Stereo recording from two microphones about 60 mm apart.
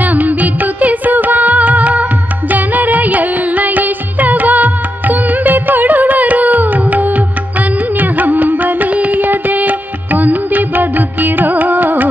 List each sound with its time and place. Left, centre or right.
0.0 s music: right
8.0 s carnatic music: right